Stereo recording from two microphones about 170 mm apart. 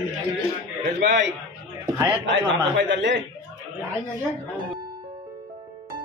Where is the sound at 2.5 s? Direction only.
90° right.